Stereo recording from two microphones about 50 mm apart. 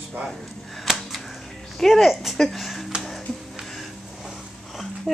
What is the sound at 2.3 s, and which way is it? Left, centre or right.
Speech, centre.